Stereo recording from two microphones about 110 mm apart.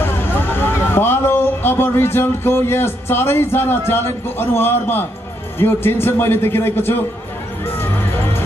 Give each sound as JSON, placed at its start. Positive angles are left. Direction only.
{"t": 0.0, "sound": "a man's voice", "side_deg": 20}